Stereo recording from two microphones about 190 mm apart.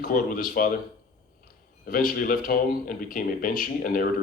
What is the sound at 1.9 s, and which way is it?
Speech, 45° left (ahead or behind).